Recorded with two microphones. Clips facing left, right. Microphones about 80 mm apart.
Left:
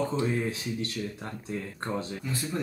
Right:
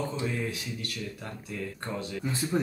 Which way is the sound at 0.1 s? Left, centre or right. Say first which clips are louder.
Left 4 dB; left.